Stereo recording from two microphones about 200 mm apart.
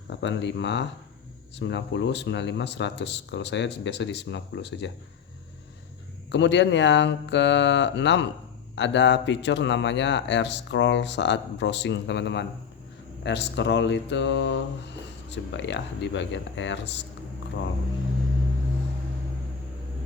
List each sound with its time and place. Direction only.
0.2 s a man's voice: 65° left (ahead or behind)
6.3 s a man's voice: 60° left (ahead or behind)